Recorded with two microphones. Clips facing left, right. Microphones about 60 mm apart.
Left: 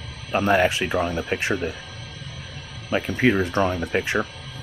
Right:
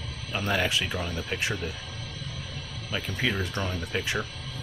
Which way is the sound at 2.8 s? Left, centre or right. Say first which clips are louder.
Left 9 dB; left.